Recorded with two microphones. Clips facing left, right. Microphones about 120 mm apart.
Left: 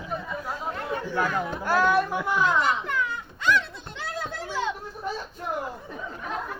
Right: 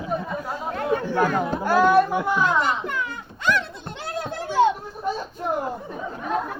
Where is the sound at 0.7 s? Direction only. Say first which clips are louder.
Right 8 dB; 55° right (ahead or behind).